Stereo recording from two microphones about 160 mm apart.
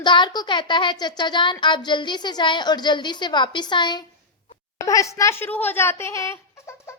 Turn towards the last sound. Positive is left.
turn(degrees=15)  # may be behind; listen again after turning